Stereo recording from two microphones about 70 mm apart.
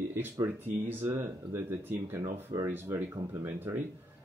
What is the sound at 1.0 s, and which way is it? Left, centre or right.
Speech, right.